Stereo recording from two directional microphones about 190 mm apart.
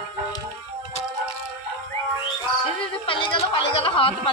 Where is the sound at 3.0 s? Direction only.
25° left (ahead or behind).